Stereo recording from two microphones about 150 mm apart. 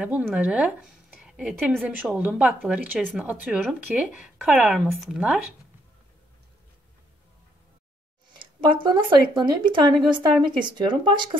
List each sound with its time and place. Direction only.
0.0 s speech: 10° right (ahead or behind)
8.3 s speech: 30° right (ahead or behind)